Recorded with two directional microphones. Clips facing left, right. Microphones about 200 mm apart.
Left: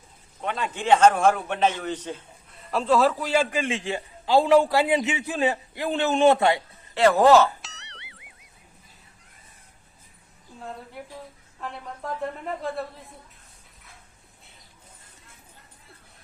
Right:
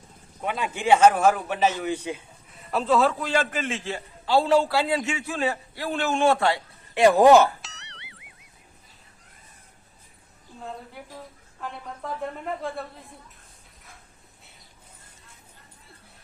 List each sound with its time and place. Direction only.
0.4 s a man's voice: 10° right (ahead or behind)
2.6 s a man's voice: centre (ahead or behind); by 6.6 s 20° left (ahead or behind)
6.9 s a man's voice: 15° right (ahead or behind)
7.6 s music: centre (ahead or behind)
11.6 s a woman's voice: centre (ahead or behind)